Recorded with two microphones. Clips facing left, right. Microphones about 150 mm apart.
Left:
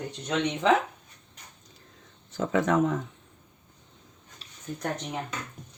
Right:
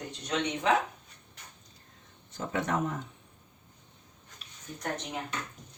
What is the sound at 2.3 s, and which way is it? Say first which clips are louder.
Speech: left 7 dB; 90° left.